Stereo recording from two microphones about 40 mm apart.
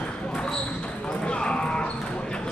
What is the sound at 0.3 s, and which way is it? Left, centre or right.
Basketball bounce, centre.